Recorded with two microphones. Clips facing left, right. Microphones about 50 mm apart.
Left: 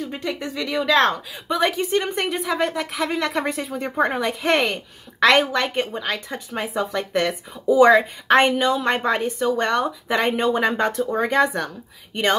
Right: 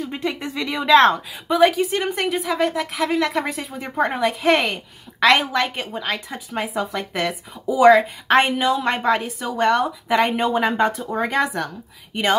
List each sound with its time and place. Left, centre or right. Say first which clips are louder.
0.0 s speech: right 1 dB; right
1.5 s a woman's voice: right 4 dB; centre